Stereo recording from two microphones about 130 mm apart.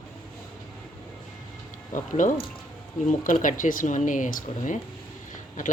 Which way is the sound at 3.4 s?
90° left.